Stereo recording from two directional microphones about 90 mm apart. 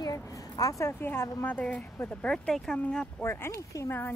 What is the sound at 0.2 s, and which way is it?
Speech, 40° left (ahead or behind).